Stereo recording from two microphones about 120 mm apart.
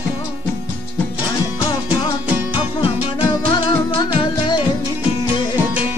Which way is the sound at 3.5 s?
40° left (ahead or behind).